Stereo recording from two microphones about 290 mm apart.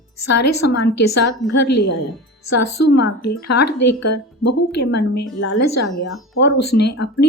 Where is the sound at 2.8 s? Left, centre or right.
Left.